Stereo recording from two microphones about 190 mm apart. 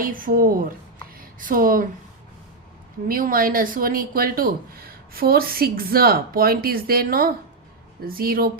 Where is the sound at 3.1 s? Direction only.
50° right (ahead or behind).